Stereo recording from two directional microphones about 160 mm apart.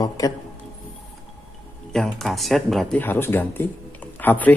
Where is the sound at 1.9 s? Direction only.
Centre (ahead or behind).